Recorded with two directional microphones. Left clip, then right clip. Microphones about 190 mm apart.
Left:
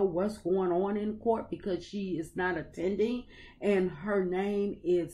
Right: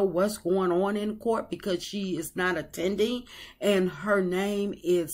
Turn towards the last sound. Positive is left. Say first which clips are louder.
# right 3 dB
turn(degrees=-15)  # may be behind; listen again after turning